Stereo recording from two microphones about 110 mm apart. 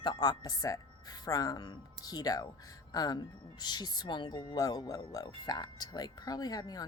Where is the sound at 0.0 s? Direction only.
40° left (ahead or behind).